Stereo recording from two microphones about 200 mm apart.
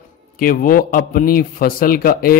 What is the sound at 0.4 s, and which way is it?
A man's voice, 45° left (ahead or behind).